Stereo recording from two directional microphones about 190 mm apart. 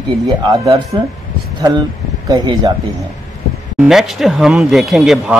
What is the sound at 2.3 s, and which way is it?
Speech, 20° right (ahead or behind).